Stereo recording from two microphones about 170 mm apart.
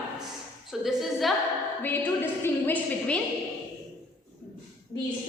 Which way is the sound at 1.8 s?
10° left (ahead or behind).